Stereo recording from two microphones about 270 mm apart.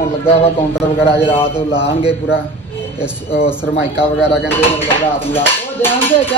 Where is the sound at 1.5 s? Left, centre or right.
Centre.